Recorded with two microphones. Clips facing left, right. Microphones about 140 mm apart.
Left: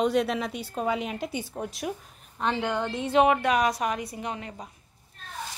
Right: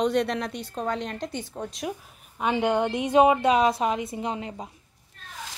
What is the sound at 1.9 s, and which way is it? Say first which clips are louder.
A woman's voice: even; 10° right (ahead or behind).